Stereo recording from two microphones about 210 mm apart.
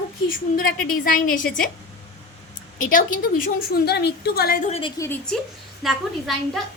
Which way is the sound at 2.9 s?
40° left (ahead or behind).